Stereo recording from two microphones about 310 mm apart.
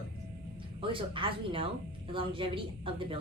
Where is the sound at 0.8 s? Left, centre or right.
Centre.